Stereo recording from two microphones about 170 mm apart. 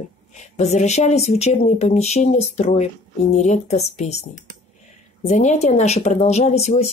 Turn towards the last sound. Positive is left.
turn(degrees=40)  # may be behind; listen again after turning